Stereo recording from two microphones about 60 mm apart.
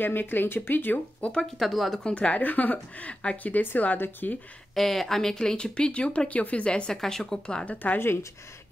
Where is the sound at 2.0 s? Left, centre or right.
Centre.